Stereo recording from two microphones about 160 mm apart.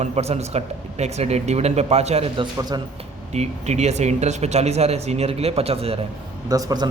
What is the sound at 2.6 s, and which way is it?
Speech, 25° right (ahead or behind).